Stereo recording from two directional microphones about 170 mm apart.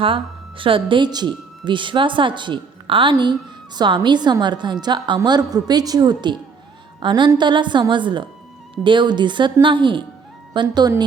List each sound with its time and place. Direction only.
0.0 s a woman's voice: 30° right (ahead or behind)